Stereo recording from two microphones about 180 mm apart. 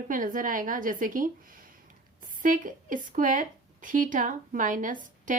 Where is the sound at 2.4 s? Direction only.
50° right (ahead or behind).